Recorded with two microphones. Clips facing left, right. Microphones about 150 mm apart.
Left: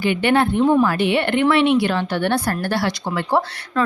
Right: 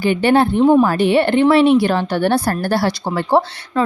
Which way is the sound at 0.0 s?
35° right (ahead or behind).